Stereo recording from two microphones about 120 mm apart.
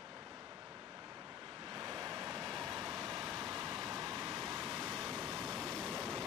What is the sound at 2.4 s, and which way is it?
Vehicle, centre (ahead or behind).